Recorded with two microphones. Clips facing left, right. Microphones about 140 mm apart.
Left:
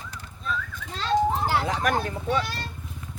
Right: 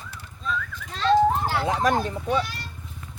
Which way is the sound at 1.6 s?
25° right (ahead or behind).